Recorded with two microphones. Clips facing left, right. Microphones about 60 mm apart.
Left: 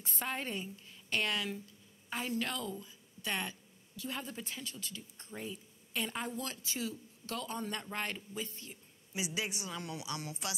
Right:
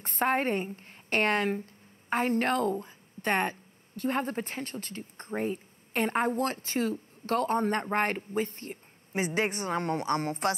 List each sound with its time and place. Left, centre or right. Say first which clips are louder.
0.0 s a woman's voice: right 12 dB; right